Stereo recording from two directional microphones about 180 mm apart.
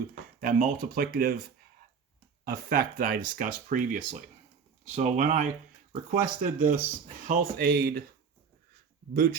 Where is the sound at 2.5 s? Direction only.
55° right (ahead or behind).